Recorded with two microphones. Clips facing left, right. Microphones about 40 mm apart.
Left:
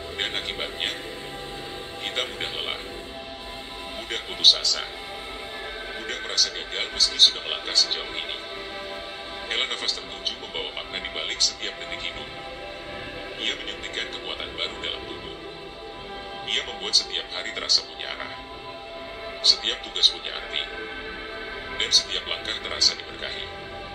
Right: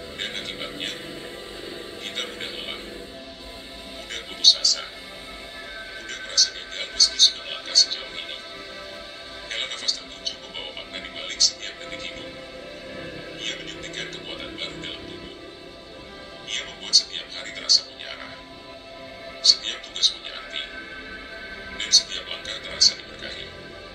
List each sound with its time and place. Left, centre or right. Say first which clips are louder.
0.2 s speech: left 3 dB; left
2.0 s speech: left 4 dB; left
4.1 s speech: even; left
6.0 s speech: right 1 dB; left
9.5 s speech: left 2 dB; left
13.4 s speech: left 4 dB; left
16.4 s speech: left 3 dB; left
19.4 s speech: even; left
21.7 s speech: even; left